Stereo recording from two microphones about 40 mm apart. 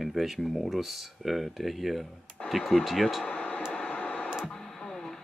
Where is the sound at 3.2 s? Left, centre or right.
Left.